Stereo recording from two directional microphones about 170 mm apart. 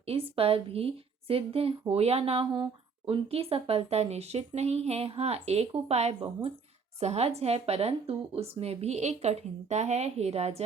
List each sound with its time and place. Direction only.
0.0 s speech: 35° right (ahead or behind)